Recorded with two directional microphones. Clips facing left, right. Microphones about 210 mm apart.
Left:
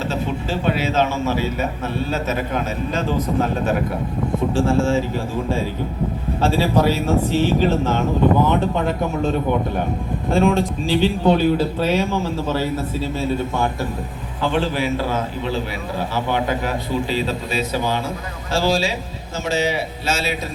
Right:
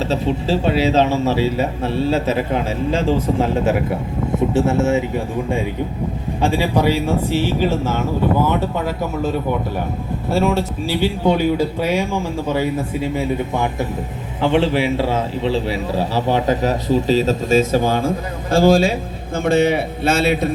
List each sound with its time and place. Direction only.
0.1 s a man's voice: 30° right (ahead or behind); by 9.3 s 10° right (ahead or behind)
10.3 s a man's voice: 5° right (ahead or behind); by 20.5 s 55° right (ahead or behind)